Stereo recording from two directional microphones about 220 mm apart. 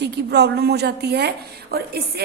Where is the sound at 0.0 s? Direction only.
50° right (ahead or behind).